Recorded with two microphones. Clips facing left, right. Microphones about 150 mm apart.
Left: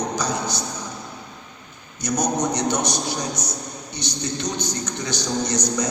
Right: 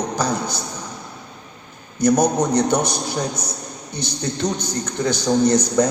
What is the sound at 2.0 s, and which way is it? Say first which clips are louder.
Speech: right 6 dB; 55° right (ahead or behind).